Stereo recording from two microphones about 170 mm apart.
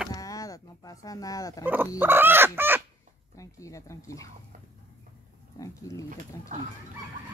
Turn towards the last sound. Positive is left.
turn(degrees=20)  # may be behind; listen again after turning